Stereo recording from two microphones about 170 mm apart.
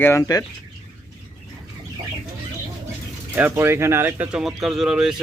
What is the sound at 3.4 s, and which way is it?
Speech, 10° right (ahead or behind).